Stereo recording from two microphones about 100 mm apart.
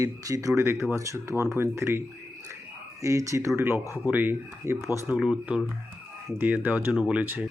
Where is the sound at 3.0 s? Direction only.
30° right (ahead or behind).